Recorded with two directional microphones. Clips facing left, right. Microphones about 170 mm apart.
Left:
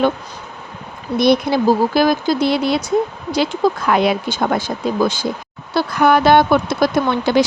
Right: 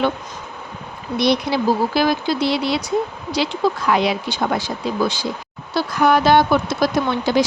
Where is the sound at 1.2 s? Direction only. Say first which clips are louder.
Left 4 dB; 50° left (ahead or behind).